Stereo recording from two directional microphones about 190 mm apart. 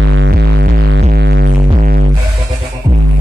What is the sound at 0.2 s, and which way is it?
Music, 60° right (ahead or behind).